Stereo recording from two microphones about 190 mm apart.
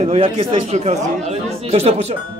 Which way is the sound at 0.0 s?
30° right (ahead or behind).